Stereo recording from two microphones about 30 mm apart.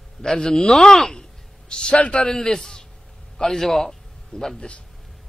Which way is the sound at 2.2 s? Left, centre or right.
Centre.